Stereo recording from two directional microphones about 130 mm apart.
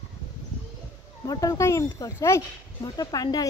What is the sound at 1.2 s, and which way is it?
Speech, 25° left (ahead or behind).